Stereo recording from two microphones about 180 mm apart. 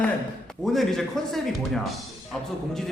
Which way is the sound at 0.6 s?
Centre (ahead or behind).